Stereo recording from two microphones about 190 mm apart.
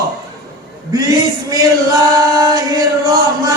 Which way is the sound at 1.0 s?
20° right (ahead or behind).